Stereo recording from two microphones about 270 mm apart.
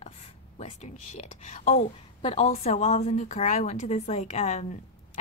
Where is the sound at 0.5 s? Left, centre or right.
Left.